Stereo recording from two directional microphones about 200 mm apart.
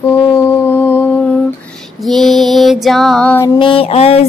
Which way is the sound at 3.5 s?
25° left (ahead or behind).